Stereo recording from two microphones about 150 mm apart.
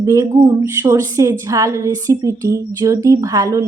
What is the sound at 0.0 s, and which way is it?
A woman's voice, 20° right (ahead or behind).